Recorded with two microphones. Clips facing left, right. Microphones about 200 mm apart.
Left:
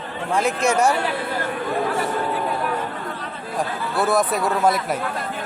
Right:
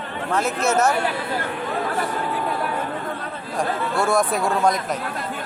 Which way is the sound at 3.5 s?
Centre (ahead or behind).